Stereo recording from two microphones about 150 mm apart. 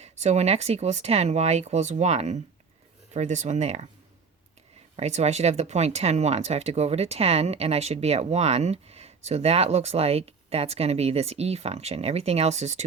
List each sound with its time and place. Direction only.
0.0 s speech: 45° right (ahead or behind)
4.9 s speech: 45° right (ahead or behind)